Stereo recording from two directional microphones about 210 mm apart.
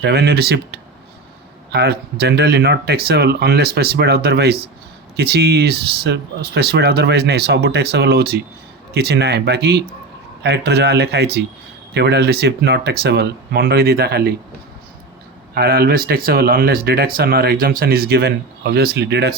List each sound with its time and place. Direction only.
0.0 s speech: 50° right (ahead or behind)
15.5 s speech: 45° right (ahead or behind)